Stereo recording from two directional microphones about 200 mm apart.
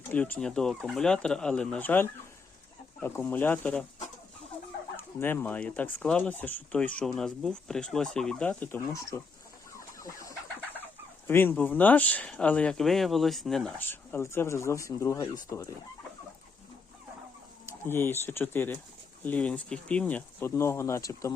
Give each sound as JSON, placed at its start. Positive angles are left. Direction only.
{"t": 0.1, "sound": "speech", "side_deg": 10}
{"t": 4.9, "sound": "speech", "side_deg": 10}
{"t": 9.7, "sound": "chicken", "side_deg": 15}
{"t": 11.3, "sound": "speech", "side_deg": 10}
{"t": 17.8, "sound": "speech", "side_deg": 10}